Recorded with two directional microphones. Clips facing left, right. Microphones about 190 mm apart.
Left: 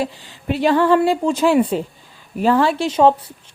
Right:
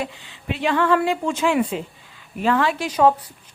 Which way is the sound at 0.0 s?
40° left (ahead or behind).